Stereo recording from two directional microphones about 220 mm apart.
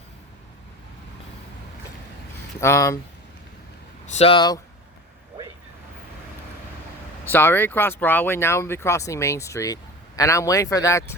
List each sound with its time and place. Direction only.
2.6 s speech: 10° left (ahead or behind)
4.0 s speech: 30° left (ahead or behind)
7.3 s speech: 10° left (ahead or behind)